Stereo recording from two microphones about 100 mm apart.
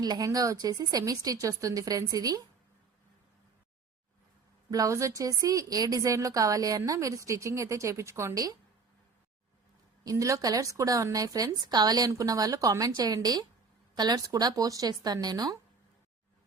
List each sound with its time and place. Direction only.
0.0 s a woman's voice: 40° right (ahead or behind)
4.7 s a woman's voice: 35° right (ahead or behind)
10.0 s a woman's voice: 35° right (ahead or behind)